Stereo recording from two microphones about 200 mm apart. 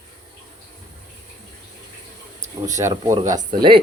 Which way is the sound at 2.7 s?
15° right (ahead or behind).